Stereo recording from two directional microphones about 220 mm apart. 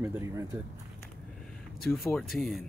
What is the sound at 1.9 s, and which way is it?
Speech, 10° left (ahead or behind).